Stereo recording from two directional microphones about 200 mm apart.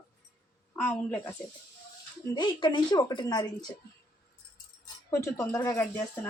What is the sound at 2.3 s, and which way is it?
A woman's voice, 25° left (ahead or behind).